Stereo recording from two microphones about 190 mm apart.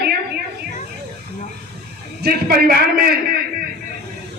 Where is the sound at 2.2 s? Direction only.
50° right (ahead or behind).